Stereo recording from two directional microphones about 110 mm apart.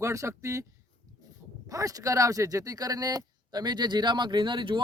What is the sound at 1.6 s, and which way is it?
Speech, 30° right (ahead or behind).